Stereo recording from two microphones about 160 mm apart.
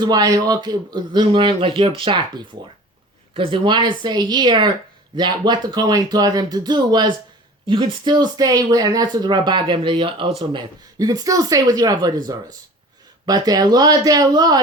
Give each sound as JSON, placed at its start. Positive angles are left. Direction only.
{"t": 0.0, "sound": "speech", "side_deg": -25}
{"t": 3.3, "sound": "speech", "side_deg": -35}